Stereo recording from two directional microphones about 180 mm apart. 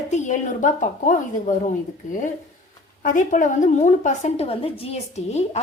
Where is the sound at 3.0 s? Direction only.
45° left (ahead or behind).